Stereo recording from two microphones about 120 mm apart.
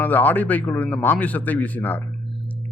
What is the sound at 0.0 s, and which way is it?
Speech, 15° left (ahead or behind).